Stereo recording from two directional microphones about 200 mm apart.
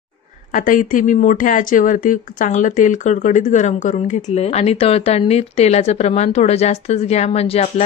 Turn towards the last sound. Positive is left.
turn(degrees=30)  # may be behind; listen again after turning